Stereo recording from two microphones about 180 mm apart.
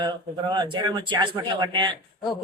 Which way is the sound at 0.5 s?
25° right (ahead or behind).